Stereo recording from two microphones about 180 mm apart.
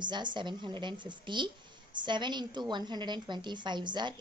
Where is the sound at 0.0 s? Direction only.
25° right (ahead or behind).